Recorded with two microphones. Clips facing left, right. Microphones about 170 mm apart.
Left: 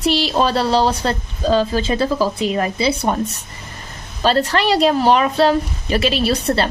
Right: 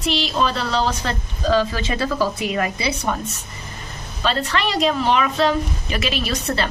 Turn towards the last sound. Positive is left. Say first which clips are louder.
# left 5 dB
turn(degrees=30)  # may be behind; listen again after turning